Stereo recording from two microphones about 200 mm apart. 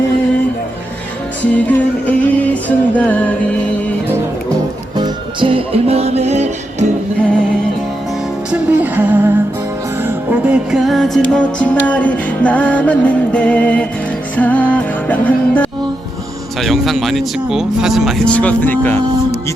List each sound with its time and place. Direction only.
1.5 s music: 10° left (ahead or behind)
4.9 s music: 25° right (ahead or behind)
8.4 s music: 5° right (ahead or behind); by 15.7 s 10° left (ahead or behind)
16.6 s speech: centre (ahead or behind)